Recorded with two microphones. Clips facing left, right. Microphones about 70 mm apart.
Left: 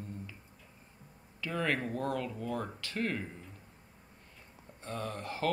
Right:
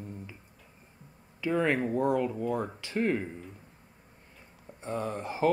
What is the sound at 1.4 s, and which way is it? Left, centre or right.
Speech, centre.